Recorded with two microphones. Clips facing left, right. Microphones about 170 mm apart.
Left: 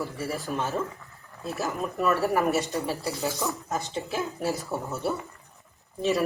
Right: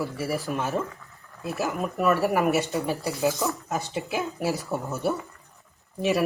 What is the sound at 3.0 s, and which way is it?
Speech, 10° right (ahead or behind).